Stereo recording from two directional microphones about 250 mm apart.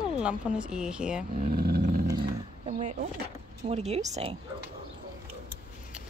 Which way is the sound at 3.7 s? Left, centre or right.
Right.